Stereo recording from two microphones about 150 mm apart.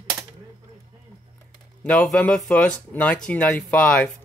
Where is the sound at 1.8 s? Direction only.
5° left (ahead or behind).